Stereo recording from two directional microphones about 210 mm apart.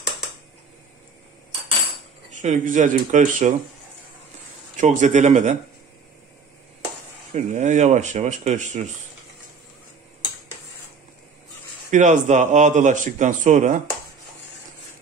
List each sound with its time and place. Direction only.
2.3 s a man's voice: 35° right (ahead or behind)
4.7 s a man's voice: 35° right (ahead or behind)
7.3 s a man's voice: 35° right (ahead or behind)
11.9 s a man's voice: 35° right (ahead or behind)